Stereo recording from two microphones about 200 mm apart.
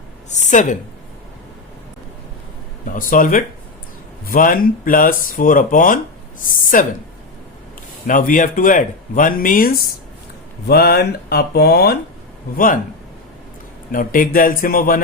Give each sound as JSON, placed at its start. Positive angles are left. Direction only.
{"t": 0.3, "sound": "a woman's voice", "side_deg": 35}
{"t": 2.9, "sound": "a woman's voice", "side_deg": 40}
{"t": 8.0, "sound": "speech", "side_deg": 40}
{"t": 13.9, "sound": "speech", "side_deg": 45}